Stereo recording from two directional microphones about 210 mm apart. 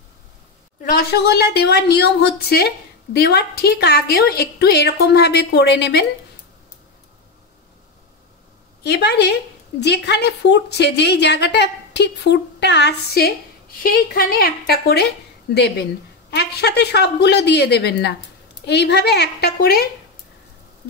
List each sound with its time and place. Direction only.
0.8 s a woman's voice: 50° left (ahead or behind)
8.8 s a woman's voice: 50° left (ahead or behind)